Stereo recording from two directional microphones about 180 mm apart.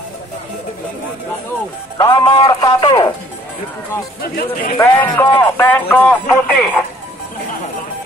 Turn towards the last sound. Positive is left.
turn(degrees=10)  # may be behind; listen again after turning